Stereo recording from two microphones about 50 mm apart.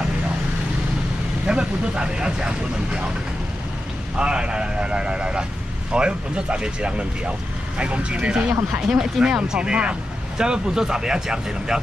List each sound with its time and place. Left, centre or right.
1.5 s speech: centre
4.2 s a man's voice: centre